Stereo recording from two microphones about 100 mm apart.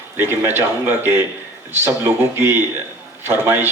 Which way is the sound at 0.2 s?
20° right (ahead or behind).